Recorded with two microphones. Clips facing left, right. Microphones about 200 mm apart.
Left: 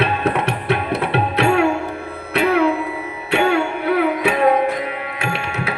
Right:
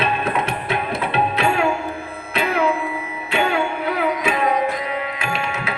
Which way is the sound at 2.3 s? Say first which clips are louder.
Left 4 dB; 70° left (ahead or behind).